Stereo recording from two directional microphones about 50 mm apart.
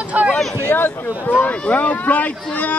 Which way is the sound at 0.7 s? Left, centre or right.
Left.